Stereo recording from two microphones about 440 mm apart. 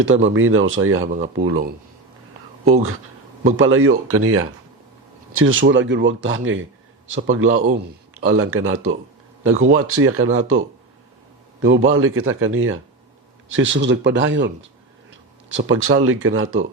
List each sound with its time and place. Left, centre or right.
0.0 s speech: right
3.4 s speech: right